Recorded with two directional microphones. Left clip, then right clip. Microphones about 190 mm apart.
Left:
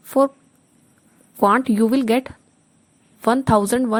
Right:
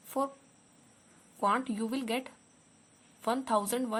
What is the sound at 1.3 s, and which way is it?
A woman's voice, 45° left (ahead or behind).